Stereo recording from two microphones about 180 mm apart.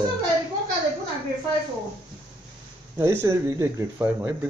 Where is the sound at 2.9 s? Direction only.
15° right (ahead or behind).